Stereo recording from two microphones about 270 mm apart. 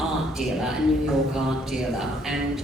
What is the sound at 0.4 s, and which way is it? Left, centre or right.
Speech, centre.